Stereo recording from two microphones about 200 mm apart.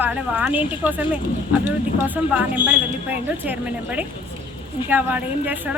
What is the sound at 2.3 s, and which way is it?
Speech, 5° right (ahead or behind).